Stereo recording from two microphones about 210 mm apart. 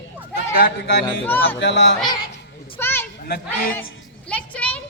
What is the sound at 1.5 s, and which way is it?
Speech, 55° left (ahead or behind).